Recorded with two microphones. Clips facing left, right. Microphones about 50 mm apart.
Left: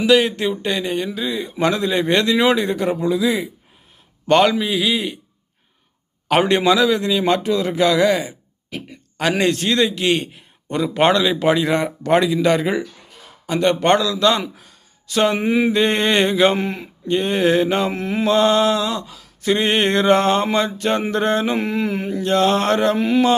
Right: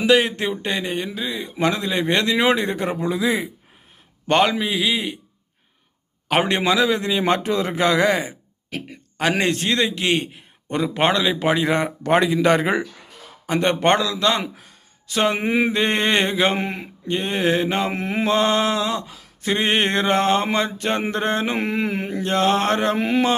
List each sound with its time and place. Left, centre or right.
0.0 s a man's voice: right
6.2 s a man's voice: centre; by 8.4 s right
8.7 s speech: right
9.4 s a man's voice: right
13.5 s a man's voice: right
15.4 s a man's voice: right
15.7 s speech: centre
16.6 s a man's voice: right
17.1 s speech: centre
17.9 s a man's voice: right; by 21.4 s centre
21.4 s a man's voice: right
22.3 s a man's voice: right
23.0 s a man's voice: right